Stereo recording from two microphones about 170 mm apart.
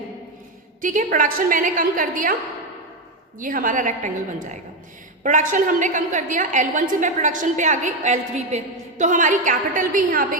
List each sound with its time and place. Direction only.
0.8 s a woman's voice: 50° right (ahead or behind)
3.4 s a woman's voice: 55° right (ahead or behind)